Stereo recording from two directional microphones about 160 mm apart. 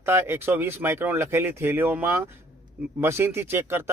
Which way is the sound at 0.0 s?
15° right (ahead or behind).